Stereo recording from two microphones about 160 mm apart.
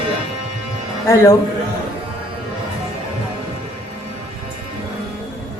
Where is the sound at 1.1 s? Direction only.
15° left (ahead or behind).